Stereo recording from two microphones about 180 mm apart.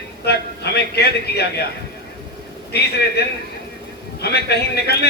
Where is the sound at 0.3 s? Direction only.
65° left (ahead or behind).